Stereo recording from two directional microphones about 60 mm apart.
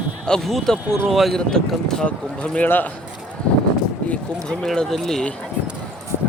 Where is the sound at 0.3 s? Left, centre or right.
Centre.